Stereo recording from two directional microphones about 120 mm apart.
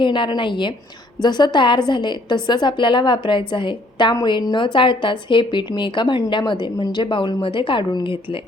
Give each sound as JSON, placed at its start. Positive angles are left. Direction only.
{"t": 0.0, "sound": "a woman's voice", "side_deg": 40}